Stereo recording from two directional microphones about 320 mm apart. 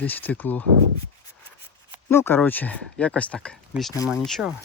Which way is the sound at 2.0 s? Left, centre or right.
Centre.